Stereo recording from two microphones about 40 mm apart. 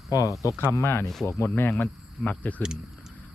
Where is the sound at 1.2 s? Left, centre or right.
Left.